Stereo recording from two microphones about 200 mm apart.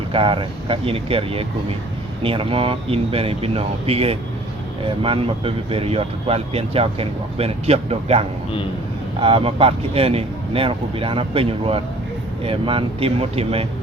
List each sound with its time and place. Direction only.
0.1 s speech: 25° right (ahead or behind)